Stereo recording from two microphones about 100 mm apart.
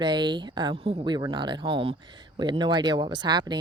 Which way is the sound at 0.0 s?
50° right (ahead or behind).